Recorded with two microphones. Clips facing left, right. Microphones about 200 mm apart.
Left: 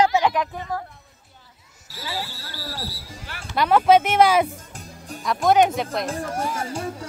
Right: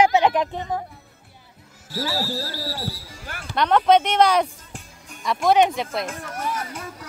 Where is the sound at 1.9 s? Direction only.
45° right (ahead or behind).